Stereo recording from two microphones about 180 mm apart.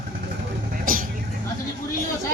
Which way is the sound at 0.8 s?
50° right (ahead or behind).